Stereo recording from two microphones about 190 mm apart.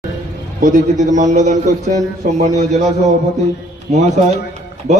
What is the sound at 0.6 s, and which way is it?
A man's voice, 40° right (ahead or behind).